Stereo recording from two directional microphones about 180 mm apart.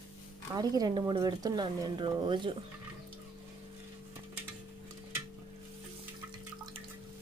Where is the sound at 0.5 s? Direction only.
20° right (ahead or behind).